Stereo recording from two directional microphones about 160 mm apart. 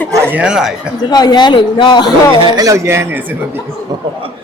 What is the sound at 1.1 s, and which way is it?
Speech, 25° left (ahead or behind).